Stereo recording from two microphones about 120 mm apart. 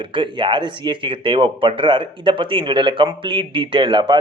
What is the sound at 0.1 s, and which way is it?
Speech, 45° right (ahead or behind).